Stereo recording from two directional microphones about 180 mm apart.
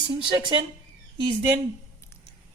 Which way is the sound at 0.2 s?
25° right (ahead or behind).